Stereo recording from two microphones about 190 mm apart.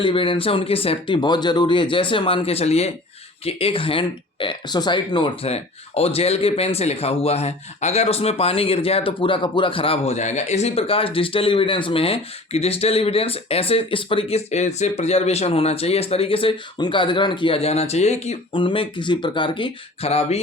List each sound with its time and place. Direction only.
0.0 s speech: 25° left (ahead or behind)